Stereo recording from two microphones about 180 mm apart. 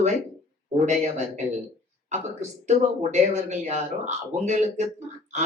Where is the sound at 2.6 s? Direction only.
40° right (ahead or behind).